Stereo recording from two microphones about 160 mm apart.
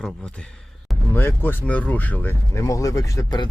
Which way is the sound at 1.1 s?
15° left (ahead or behind).